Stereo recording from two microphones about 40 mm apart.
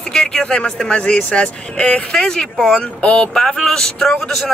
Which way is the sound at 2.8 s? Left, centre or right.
Left.